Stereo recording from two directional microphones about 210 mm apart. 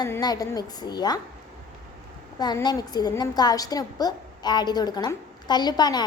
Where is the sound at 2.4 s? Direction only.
20° left (ahead or behind).